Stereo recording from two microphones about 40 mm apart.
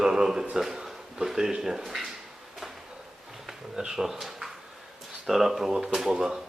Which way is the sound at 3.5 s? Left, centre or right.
Centre.